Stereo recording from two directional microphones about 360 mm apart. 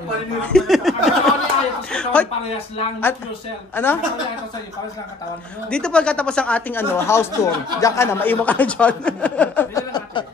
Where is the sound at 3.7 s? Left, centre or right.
Centre.